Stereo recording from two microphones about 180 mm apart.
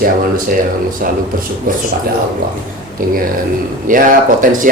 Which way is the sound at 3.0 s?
50° right (ahead or behind).